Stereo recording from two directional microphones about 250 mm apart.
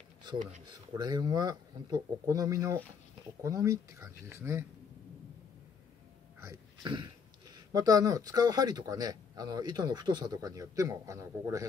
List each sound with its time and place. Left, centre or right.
0.9 s speech: centre
6.4 s speech: centre